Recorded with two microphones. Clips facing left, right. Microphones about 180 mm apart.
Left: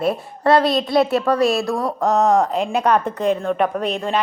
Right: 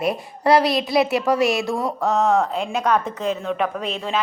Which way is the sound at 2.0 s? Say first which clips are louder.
Left 3 dB; 10° left (ahead or behind).